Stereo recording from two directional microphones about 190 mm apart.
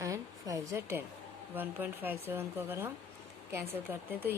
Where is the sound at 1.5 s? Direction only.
10° right (ahead or behind).